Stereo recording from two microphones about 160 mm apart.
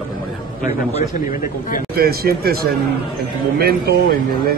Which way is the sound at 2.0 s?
75° right (ahead or behind).